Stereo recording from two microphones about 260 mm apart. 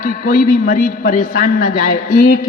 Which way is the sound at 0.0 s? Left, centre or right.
Left.